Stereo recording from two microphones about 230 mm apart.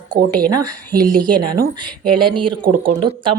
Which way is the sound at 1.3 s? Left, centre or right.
Right.